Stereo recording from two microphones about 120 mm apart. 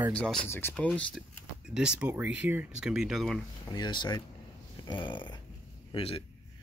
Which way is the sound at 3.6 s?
35° left (ahead or behind).